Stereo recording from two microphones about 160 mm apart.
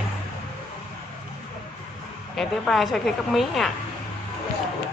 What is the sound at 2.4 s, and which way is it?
Speech, centre (ahead or behind).